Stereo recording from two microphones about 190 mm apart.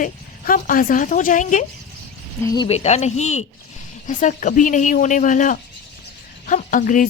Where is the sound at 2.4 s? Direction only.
20° left (ahead or behind).